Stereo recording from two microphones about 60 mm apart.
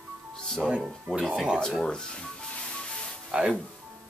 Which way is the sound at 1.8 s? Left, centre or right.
Centre.